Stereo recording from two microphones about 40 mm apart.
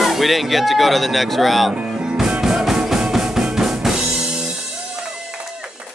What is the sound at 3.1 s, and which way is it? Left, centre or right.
Drum, centre.